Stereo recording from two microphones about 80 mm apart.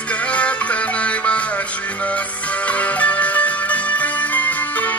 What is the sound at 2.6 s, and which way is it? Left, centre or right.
Music, centre.